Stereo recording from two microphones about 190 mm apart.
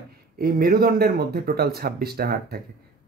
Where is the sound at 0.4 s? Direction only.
50° right (ahead or behind).